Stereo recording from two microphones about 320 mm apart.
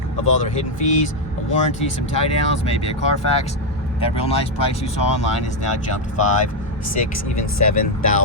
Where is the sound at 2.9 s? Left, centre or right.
Centre.